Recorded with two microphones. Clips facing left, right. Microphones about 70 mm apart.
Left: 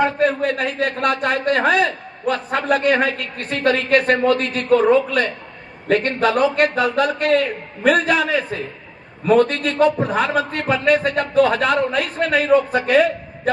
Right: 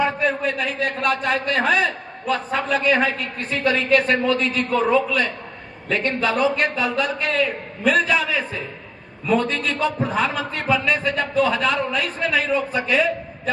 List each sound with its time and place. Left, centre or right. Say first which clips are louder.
0.0 s a man's voice: left 3 dB; left